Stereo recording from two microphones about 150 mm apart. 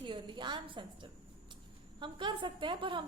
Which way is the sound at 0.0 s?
30° right (ahead or behind).